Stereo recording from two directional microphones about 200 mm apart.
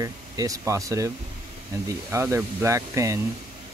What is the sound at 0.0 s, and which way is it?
Speech, 15° right (ahead or behind).